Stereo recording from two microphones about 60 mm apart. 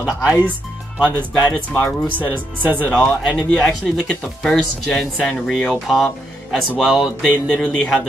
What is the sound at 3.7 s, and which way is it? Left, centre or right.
Speech, centre.